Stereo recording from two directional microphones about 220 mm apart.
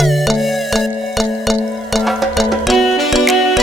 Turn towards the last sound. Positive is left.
turn(degrees=0)  # may be behind; listen again after turning